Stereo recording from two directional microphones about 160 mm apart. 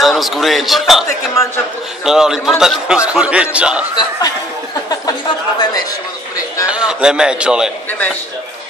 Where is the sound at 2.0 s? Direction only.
5° right (ahead or behind).